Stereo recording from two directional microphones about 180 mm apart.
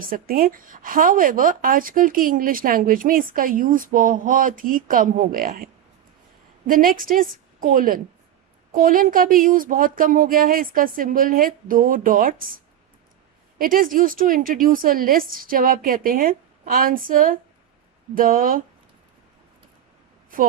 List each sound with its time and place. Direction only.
0.0 s speech: 50° right (ahead or behind)
6.7 s speech: 50° right (ahead or behind)